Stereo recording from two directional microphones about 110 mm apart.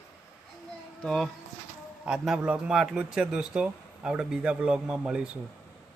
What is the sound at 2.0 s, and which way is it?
A man's voice, 5° right (ahead or behind).